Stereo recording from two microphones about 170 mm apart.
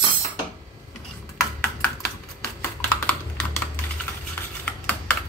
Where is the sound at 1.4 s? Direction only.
5° left (ahead or behind).